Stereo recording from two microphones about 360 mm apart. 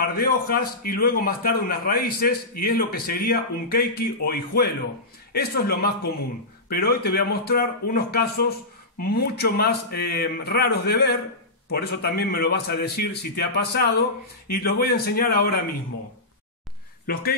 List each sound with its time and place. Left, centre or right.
0.0 s a man's voice: left
17.0 s speech: left